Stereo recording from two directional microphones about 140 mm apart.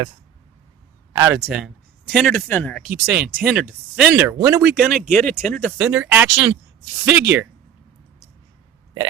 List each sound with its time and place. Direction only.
1.3 s speech: 5° right (ahead or behind)
2.8 s speech: 10° right (ahead or behind)
4.2 s speech: 20° right (ahead or behind)
4.7 s speech: 5° right (ahead or behind)
7.0 s speech: 15° right (ahead or behind)